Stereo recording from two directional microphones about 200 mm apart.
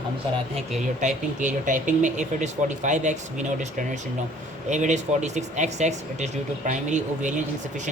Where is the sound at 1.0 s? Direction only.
40° right (ahead or behind).